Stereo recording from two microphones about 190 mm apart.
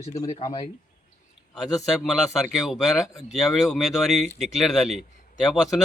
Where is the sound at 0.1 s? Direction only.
25° left (ahead or behind).